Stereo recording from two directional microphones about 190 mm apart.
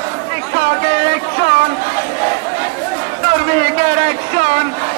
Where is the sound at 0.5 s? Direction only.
40° right (ahead or behind).